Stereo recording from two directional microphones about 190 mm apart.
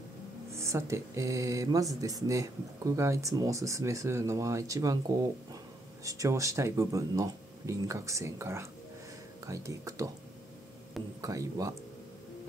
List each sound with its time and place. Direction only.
0.5 s speech: 15° right (ahead or behind)
11.1 s speech: 15° right (ahead or behind)